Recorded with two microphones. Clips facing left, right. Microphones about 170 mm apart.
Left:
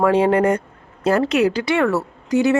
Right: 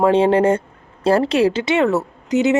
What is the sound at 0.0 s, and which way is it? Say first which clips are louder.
A woman's voice: right 2 dB; 25° right (ahead or behind).